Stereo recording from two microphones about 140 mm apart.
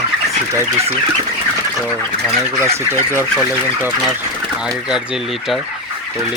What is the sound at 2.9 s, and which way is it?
Speech, 15° right (ahead or behind).